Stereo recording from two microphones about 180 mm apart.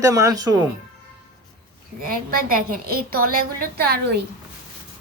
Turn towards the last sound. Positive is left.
turn(degrees=-60)  # may be behind; listen again after turning